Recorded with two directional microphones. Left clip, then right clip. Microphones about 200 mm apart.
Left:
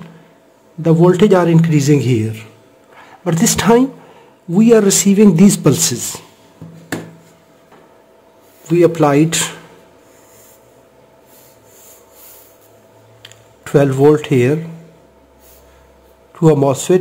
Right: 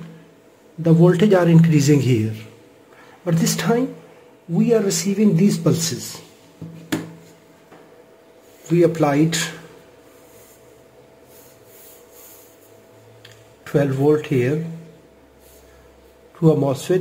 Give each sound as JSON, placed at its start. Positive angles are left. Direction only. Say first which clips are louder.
{"t": 0.8, "sound": "a man's voice", "louder": "left 5 dB", "side_deg": 25}
{"t": 3.3, "sound": "speech", "louder": "left 8 dB", "side_deg": 30}
{"t": 8.7, "sound": "a man's voice", "louder": "left 5 dB", "side_deg": 25}
{"t": 13.2, "sound": "speech", "louder": "left 7 dB", "side_deg": 35}
{"t": 16.3, "sound": "a man's voice", "louder": "left 6 dB", "side_deg": 30}